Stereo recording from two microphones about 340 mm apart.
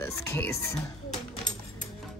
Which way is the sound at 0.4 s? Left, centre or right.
Centre.